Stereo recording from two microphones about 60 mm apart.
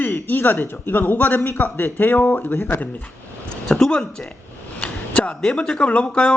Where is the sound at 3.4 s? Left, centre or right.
Centre.